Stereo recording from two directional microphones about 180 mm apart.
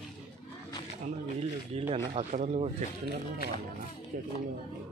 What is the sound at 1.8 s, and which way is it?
Speech, 35° right (ahead or behind).